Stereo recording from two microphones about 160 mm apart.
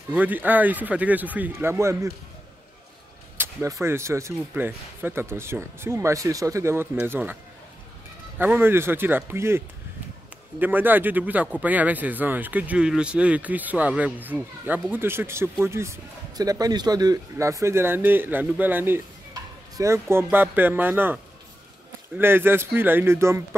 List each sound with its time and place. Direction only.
0.1 s speech: 10° right (ahead or behind)
3.3 s speech: 20° right (ahead or behind)
8.4 s speech: 10° right (ahead or behind)
10.6 s speech: 10° right (ahead or behind)